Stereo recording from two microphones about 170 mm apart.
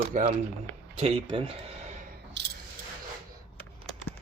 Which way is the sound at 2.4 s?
90° right.